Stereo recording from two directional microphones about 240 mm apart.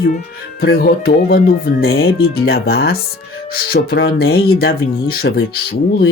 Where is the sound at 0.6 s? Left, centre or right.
Left.